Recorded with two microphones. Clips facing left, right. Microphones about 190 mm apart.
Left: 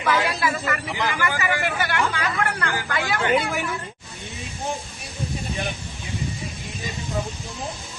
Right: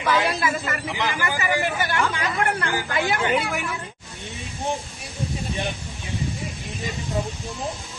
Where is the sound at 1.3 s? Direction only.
15° right (ahead or behind).